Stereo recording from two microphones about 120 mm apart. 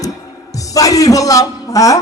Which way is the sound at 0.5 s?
30° left (ahead or behind).